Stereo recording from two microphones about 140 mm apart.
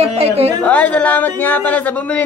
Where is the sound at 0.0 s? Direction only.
45° right (ahead or behind).